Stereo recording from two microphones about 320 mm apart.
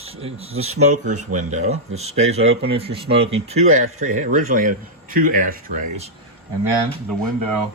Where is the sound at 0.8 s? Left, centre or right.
Right.